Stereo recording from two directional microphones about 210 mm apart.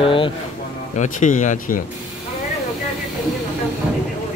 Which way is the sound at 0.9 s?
35° left (ahead or behind).